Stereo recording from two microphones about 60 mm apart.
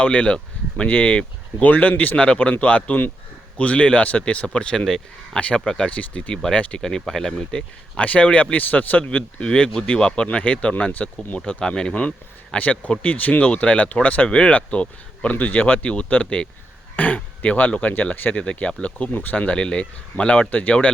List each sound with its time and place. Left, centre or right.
0.0 s speech: centre